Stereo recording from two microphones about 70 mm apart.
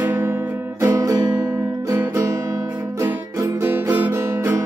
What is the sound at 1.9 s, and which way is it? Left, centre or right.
Music, right.